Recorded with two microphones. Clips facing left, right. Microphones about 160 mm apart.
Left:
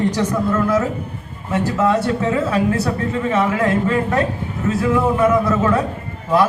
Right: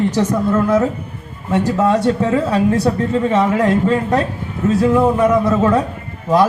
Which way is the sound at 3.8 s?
30° right (ahead or behind).